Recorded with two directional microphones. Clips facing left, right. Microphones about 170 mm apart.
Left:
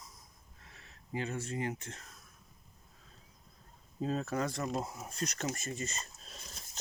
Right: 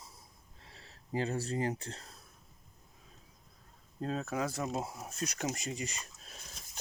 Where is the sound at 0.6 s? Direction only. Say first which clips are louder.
Right 2 dB; 30° right (ahead or behind).